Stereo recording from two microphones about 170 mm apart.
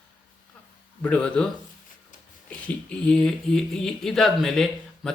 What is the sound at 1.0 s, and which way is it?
Speech, 5° left (ahead or behind).